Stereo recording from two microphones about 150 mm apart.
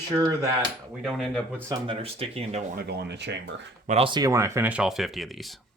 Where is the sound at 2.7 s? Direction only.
90° right.